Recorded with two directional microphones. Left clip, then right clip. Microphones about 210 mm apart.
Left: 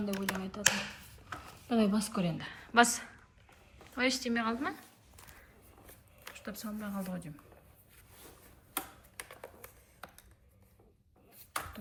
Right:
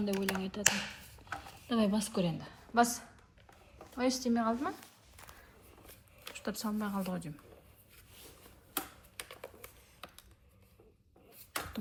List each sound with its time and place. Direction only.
0.0 s speech: centre (ahead or behind)
2.4 s a woman's voice: 10° right (ahead or behind)
3.9 s speech: 15° right (ahead or behind)
5.8 s a sound: centre (ahead or behind)
8.7 s a sound: centre (ahead or behind)
11.5 s beatboxing: centre (ahead or behind)